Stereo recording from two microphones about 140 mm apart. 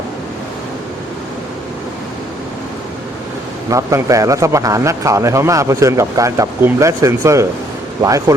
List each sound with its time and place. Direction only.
3.7 s a man's voice: 20° right (ahead or behind)